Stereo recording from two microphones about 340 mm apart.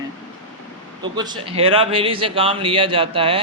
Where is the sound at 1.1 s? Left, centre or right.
Centre.